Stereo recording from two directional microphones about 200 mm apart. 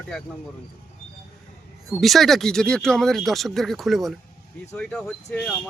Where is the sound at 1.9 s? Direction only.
Centre (ahead or behind).